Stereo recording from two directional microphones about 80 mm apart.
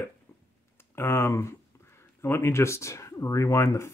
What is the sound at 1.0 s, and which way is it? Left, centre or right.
Speech, left.